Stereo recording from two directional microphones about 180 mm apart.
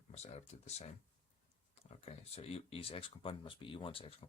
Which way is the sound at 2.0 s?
35° left (ahead or behind).